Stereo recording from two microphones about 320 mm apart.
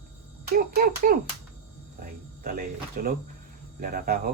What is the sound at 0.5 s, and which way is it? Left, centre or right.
Speech, right.